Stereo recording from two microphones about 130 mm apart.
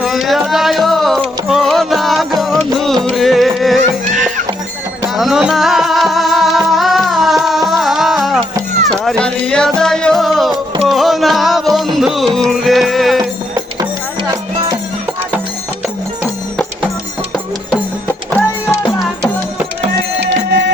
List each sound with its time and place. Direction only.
0.0 s music: centre (ahead or behind)
5.0 s music: centre (ahead or behind)
13.7 s music: 30° right (ahead or behind)
18.1 s music: 20° left (ahead or behind)